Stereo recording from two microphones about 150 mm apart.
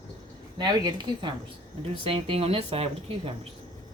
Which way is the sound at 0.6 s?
30° right (ahead or behind).